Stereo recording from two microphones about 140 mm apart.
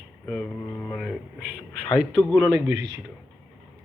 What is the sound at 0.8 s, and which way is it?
Speech, centre (ahead or behind).